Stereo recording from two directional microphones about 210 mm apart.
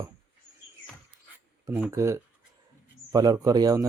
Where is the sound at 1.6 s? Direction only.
10° right (ahead or behind).